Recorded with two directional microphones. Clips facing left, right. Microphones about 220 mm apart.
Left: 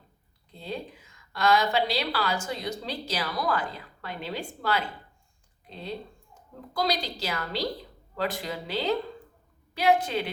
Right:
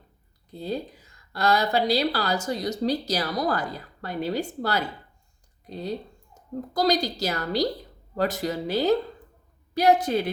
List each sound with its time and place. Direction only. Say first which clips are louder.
0.5 s a woman's voice: right 5 dB; 40° right (ahead or behind)